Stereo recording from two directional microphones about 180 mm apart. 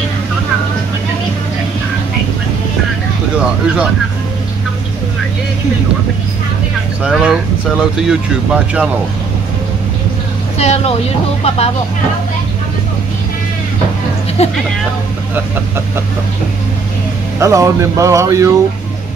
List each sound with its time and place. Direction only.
3.3 s a sound: 5° right (ahead or behind)
7.0 s speech: 5° right (ahead or behind)
10.6 s speech: 35° left (ahead or behind)
14.4 s speech: 35° left (ahead or behind)
17.4 s speech: 15° right (ahead or behind)